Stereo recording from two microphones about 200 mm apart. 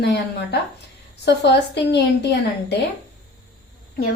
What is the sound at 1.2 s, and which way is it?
Speech, 60° left (ahead or behind).